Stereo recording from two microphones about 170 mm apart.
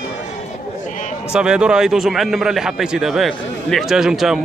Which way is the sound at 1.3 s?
5° right (ahead or behind).